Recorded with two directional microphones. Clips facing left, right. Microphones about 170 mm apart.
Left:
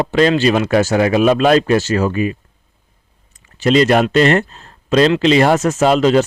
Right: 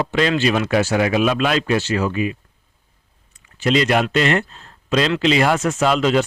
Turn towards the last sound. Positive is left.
turn(degrees=40)  # may be behind; listen again after turning